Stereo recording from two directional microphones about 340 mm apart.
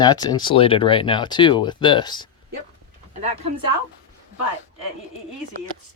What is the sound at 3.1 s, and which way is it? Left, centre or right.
Speech, centre.